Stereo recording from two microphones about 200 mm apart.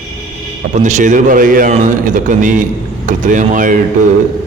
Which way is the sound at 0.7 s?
40° right (ahead or behind).